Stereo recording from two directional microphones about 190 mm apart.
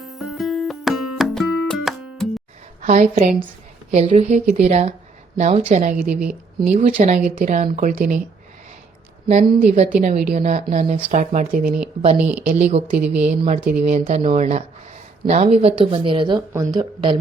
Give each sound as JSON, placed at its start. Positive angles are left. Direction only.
{"t": 0.0, "sound": "music", "side_deg": 0}
{"t": 2.8, "sound": "a woman's voice", "side_deg": -40}
{"t": 6.1, "sound": "speech", "side_deg": -5}
{"t": 6.9, "sound": "speech", "side_deg": -40}
{"t": 9.2, "sound": "a woman's voice", "side_deg": -35}
{"t": 12.1, "sound": "speech", "side_deg": -10}
{"t": 12.5, "sound": "a woman's voice", "side_deg": -35}
{"t": 13.0, "sound": "speech", "side_deg": -5}
{"t": 13.8, "sound": "a woman's voice", "side_deg": -35}